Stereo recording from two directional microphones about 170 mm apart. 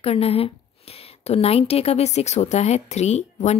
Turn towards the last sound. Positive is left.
turn(degrees=40)  # may be behind; listen again after turning